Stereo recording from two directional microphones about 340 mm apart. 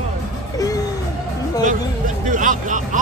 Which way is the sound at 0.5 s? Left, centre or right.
Centre.